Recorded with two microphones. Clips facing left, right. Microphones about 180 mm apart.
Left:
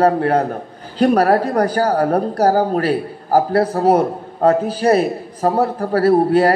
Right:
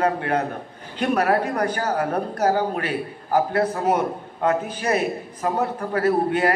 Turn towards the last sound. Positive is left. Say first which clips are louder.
# left 7 dB
turn(degrees=35)  # may be behind; listen again after turning